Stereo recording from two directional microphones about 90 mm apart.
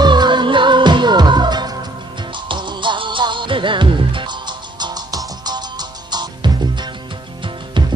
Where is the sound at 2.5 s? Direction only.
60° right (ahead or behind).